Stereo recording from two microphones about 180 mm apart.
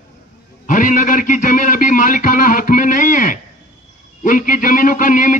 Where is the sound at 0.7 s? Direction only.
45° left (ahead or behind).